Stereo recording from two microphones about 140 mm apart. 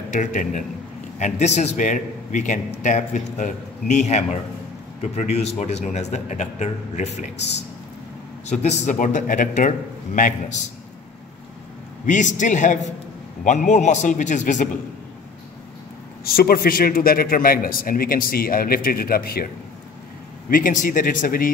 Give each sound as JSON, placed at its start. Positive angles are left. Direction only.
{"t": 0.1, "sound": "a man's voice", "side_deg": 60}
{"t": 1.2, "sound": "a man's voice", "side_deg": 55}
{"t": 8.5, "sound": "a man's voice", "side_deg": 55}
{"t": 12.1, "sound": "a man's voice", "side_deg": 60}
{"t": 16.3, "sound": "a man's voice", "side_deg": 90}
{"t": 20.4, "sound": "speech", "side_deg": 80}